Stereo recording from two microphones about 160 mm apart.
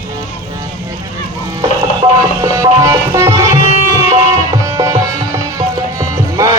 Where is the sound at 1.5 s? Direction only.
25° right (ahead or behind).